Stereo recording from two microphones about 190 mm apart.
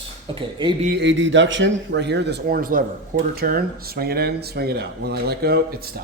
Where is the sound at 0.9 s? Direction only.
75° right (ahead or behind).